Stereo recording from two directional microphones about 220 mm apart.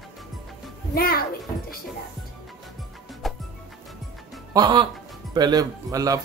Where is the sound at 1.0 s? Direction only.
45° left (ahead or behind).